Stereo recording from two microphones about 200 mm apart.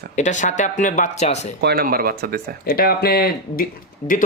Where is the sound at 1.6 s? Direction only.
50° right (ahead or behind).